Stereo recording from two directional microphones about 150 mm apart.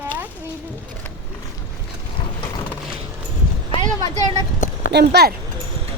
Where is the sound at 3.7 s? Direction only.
30° left (ahead or behind).